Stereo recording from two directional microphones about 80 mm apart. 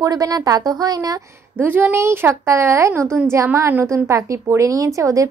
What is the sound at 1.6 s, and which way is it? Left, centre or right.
A woman's voice, right.